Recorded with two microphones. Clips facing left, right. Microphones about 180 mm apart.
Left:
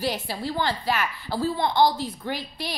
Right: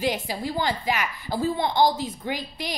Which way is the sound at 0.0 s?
15° right (ahead or behind).